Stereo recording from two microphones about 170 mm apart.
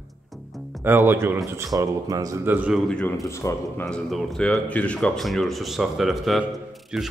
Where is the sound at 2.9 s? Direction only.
5° left (ahead or behind).